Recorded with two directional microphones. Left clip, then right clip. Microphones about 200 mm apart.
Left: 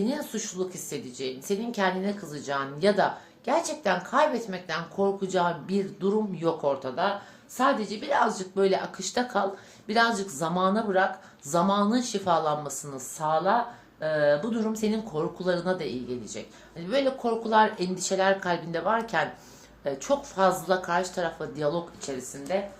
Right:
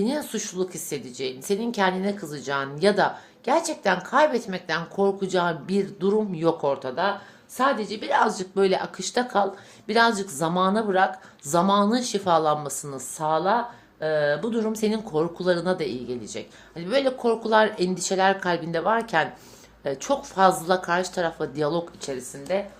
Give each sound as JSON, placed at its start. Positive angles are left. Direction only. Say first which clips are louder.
{"t": 0.0, "sound": "speech", "louder": "right 3 dB", "side_deg": -45}